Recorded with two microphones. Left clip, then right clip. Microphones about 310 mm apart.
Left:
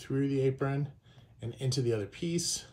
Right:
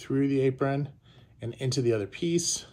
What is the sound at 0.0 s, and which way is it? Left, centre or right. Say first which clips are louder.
Speech: right 5 dB; centre.